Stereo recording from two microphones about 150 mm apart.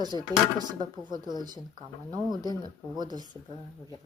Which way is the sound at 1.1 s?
30° right (ahead or behind).